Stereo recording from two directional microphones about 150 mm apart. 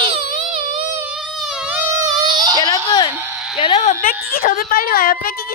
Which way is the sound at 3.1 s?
15° right (ahead or behind).